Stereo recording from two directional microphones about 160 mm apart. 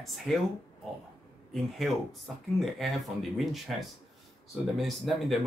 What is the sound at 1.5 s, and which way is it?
Speech, centre (ahead or behind).